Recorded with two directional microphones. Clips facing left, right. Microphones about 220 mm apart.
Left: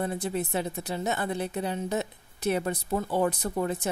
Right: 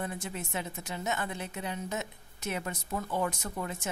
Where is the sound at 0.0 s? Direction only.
35° left (ahead or behind).